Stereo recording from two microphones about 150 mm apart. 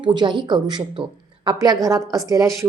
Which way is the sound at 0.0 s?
30° right (ahead or behind).